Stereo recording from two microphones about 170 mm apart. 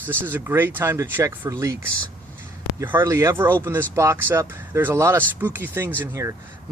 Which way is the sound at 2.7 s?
15° right (ahead or behind).